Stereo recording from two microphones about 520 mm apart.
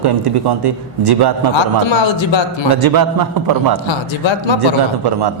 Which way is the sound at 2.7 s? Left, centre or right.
Right.